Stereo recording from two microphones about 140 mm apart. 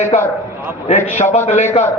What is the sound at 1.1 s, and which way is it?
Speech, 55° left (ahead or behind).